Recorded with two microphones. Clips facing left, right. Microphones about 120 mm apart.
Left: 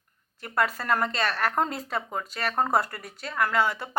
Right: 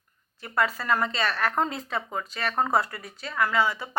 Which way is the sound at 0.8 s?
50° left (ahead or behind).